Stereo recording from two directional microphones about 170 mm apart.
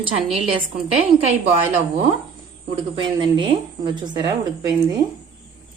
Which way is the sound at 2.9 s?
30° right (ahead or behind).